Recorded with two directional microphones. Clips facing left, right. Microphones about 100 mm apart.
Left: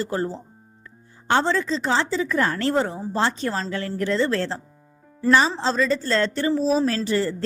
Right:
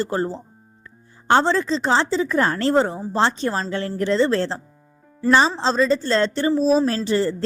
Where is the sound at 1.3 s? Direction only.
35° right (ahead or behind).